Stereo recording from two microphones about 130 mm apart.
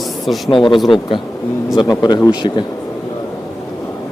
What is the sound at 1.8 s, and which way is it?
Speech, 30° left (ahead or behind).